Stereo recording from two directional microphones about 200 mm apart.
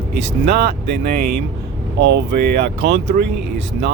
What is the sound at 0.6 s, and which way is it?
Speech, 50° right (ahead or behind).